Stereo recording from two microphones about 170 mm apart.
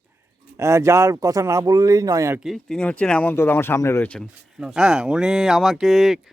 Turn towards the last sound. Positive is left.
turn(degrees=0)  # may be behind; listen again after turning